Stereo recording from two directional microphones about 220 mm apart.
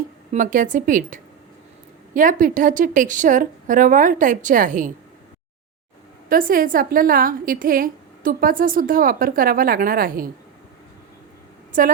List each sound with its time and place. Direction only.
0.3 s a woman's voice: 35° right (ahead or behind)
6.2 s a woman's voice: 40° right (ahead or behind)
11.7 s a woman's voice: 35° right (ahead or behind)